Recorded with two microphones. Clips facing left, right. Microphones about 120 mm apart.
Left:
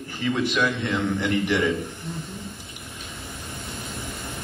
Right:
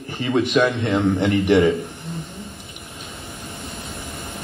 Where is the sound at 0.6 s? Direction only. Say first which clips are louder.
Right 8 dB; 40° right (ahead or behind).